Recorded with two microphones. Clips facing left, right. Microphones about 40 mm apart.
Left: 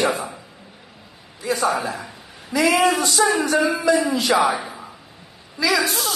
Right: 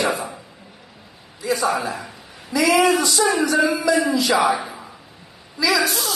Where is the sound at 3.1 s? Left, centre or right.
Centre.